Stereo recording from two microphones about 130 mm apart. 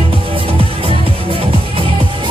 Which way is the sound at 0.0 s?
45° right (ahead or behind).